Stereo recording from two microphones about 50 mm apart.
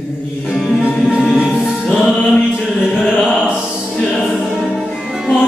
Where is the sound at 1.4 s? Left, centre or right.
Centre.